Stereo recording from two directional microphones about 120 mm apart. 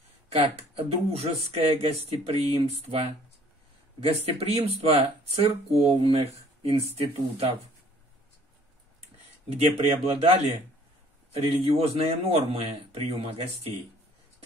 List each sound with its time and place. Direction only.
0.8 s speech: 55° right (ahead or behind)
9.5 s speech: 55° right (ahead or behind)